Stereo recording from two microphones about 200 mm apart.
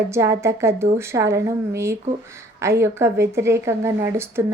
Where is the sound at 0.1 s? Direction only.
15° right (ahead or behind).